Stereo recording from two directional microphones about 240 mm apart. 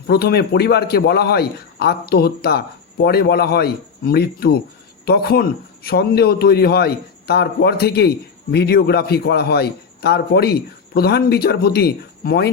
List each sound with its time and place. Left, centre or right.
0.1 s a man's voice: left